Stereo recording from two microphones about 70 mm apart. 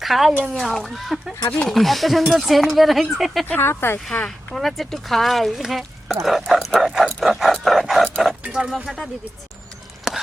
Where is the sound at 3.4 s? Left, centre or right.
Left.